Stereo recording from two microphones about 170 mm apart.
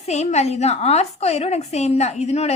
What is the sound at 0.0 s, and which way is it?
A woman's voice, 40° left (ahead or behind).